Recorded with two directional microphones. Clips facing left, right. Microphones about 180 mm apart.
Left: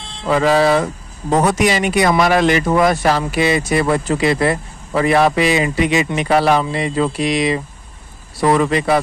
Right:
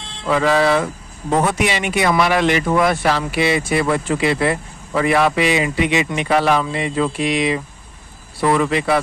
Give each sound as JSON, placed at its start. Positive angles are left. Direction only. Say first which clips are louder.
{"t": 0.3, "sound": "speech", "louder": "left 2 dB", "side_deg": 35}